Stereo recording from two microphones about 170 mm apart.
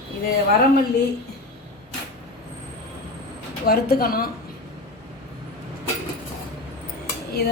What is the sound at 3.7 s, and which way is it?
Speech, 60° left (ahead or behind).